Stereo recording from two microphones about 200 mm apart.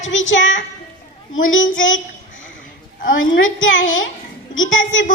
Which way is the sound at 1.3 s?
75° left (ahead or behind).